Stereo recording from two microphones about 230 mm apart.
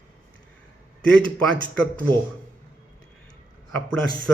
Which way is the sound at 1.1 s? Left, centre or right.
Centre.